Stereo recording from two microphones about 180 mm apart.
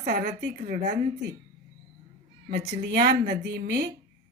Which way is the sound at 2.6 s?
65° right (ahead or behind).